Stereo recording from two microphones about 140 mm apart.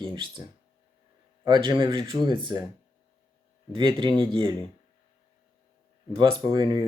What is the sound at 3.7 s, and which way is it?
Speech, 35° right (ahead or behind).